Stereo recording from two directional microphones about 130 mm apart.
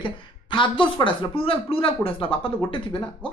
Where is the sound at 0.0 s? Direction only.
40° left (ahead or behind).